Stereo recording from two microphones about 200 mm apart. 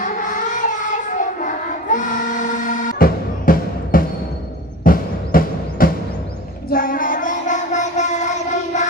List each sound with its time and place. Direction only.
0.0 s child singing: 40° left (ahead or behind)
4.8 s music: 45° left (ahead or behind)
6.7 s child singing: 45° left (ahead or behind)